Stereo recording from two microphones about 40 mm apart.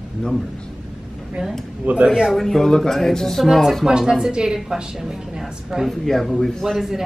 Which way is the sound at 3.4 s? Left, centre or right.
Centre.